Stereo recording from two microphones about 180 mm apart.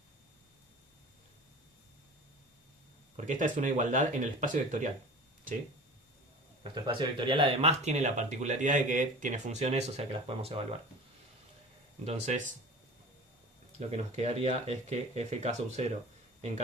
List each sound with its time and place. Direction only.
3.2 s speech: 45° right (ahead or behind)
6.6 s speech: 25° right (ahead or behind)
12.0 s speech: 40° right (ahead or behind)
13.7 s speech: 35° right (ahead or behind)